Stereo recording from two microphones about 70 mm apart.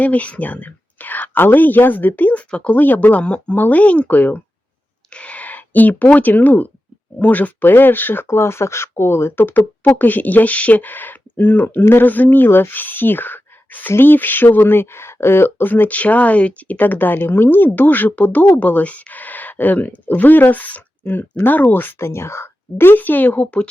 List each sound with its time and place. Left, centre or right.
0.0 s speech: left
23.0 s speech: left